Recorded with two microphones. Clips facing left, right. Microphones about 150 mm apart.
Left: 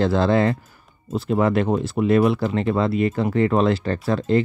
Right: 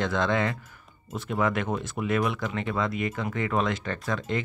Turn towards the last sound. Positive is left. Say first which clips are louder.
# left 10 dB
turn(degrees=35)  # may be behind; listen again after turning